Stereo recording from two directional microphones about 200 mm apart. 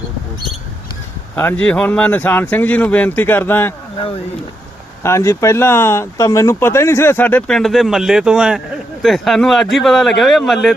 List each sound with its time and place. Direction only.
1.4 s speech: 10° left (ahead or behind)
5.0 s speech: 15° left (ahead or behind)